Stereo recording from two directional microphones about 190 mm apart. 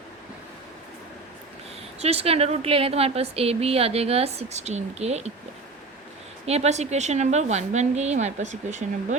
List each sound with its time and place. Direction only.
2.0 s speech: 35° right (ahead or behind)
6.4 s speech: 35° right (ahead or behind)